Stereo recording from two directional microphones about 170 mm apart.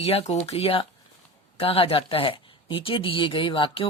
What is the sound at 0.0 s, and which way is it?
Speech, 35° left (ahead or behind).